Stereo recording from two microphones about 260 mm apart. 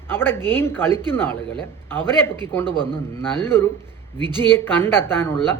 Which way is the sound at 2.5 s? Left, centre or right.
Centre.